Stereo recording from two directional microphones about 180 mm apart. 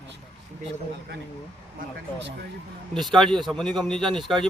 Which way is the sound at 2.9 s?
Centre (ahead or behind).